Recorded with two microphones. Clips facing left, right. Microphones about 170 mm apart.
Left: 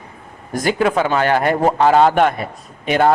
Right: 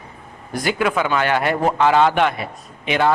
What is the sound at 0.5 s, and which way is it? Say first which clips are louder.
A man's voice: left 3 dB; 40° left (ahead or behind).